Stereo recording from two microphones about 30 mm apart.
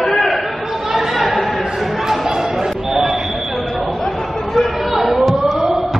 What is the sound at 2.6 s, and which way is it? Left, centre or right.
Basketball bounce, centre.